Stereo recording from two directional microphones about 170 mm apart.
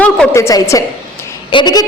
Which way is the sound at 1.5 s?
25° left (ahead or behind).